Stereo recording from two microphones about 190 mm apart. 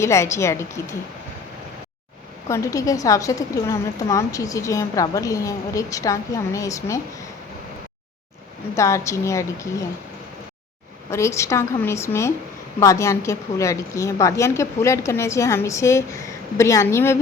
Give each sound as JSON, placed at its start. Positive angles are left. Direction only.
{"t": 0.0, "sound": "a woman's voice", "side_deg": 15}
{"t": 2.5, "sound": "a woman's voice", "side_deg": 15}
{"t": 8.7, "sound": "a woman's voice", "side_deg": 15}
{"t": 11.1, "sound": "a woman's voice", "side_deg": 15}